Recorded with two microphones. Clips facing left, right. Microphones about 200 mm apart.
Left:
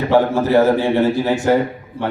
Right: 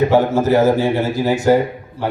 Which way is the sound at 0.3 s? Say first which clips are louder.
Even; 10° right (ahead or behind).